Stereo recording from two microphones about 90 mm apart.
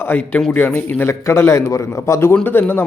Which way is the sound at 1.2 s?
35° left (ahead or behind).